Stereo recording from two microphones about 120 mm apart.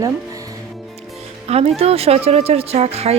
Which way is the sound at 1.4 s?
60° right (ahead or behind).